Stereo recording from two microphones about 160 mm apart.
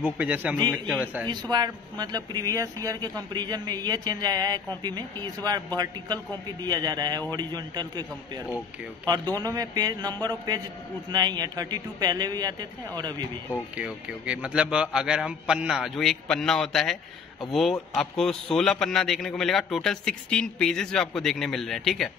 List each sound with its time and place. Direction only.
0.0 s a man's voice: 10° right (ahead or behind)
0.7 s a man's voice: 5° left (ahead or behind)
1.2 s speech: 25° right (ahead or behind)
9.0 s speech: 25° right (ahead or behind)
13.7 s a man's voice: 5° right (ahead or behind)